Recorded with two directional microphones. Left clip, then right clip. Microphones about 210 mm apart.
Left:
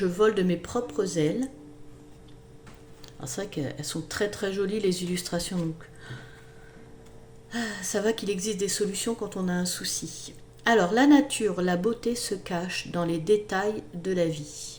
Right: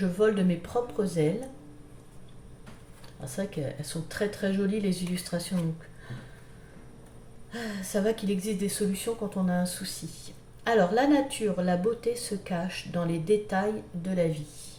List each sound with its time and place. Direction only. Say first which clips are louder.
0.2 s speech: left 1 dB; 50° left (ahead or behind)
3.2 s speech: left 1 dB; 55° left (ahead or behind)
7.5 s speech: left 2 dB; 55° left (ahead or behind)